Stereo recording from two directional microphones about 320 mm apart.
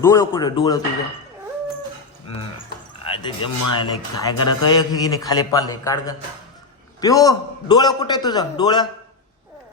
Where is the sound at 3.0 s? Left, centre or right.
Centre.